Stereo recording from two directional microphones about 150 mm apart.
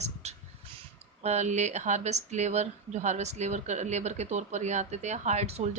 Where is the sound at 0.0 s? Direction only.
50° right (ahead or behind).